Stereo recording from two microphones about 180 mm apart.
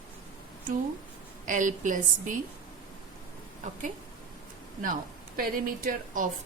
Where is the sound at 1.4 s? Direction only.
45° right (ahead or behind).